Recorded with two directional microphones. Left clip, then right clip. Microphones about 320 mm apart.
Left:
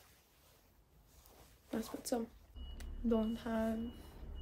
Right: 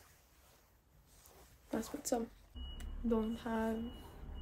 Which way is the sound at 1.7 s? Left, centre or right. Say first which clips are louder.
Right 2 dB; centre.